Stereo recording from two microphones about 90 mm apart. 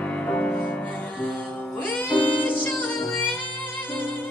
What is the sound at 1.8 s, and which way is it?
Music, 15° left (ahead or behind).